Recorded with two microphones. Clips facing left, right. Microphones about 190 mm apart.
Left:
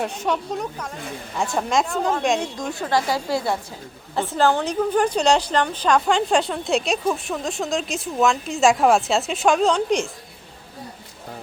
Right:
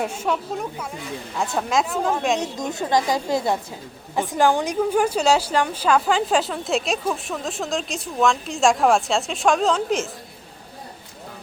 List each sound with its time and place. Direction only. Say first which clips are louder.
0.0 s a woman's voice: even; 5° right (ahead or behind)
2.4 s a woman's voice: right 1 dB; 20° right (ahead or behind); by 10.1 s centre (ahead or behind)